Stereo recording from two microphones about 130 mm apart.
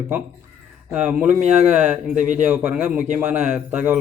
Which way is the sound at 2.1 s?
70° right (ahead or behind).